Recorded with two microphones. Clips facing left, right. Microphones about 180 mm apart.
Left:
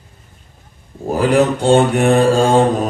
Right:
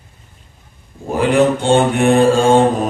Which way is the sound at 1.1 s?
40° left (ahead or behind).